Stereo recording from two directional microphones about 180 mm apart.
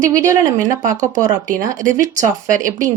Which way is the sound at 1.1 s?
50° right (ahead or behind).